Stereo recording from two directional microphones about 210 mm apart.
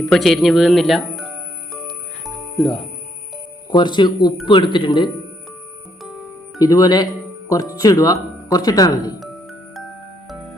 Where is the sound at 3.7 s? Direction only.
20° left (ahead or behind).